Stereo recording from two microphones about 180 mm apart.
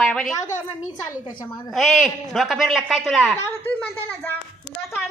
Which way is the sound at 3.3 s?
15° left (ahead or behind).